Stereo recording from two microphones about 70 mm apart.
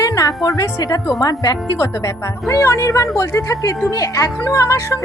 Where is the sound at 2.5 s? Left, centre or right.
Left.